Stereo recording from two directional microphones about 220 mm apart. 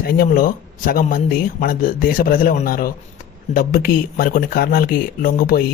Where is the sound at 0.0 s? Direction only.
40° left (ahead or behind).